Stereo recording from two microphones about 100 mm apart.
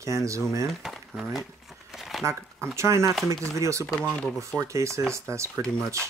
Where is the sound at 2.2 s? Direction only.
30° right (ahead or behind).